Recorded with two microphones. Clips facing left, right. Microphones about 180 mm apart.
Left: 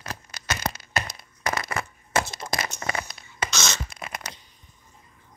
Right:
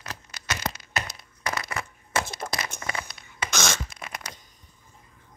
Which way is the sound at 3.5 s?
55° right (ahead or behind).